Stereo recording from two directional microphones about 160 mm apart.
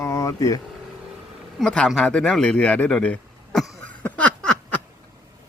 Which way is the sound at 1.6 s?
5° left (ahead or behind).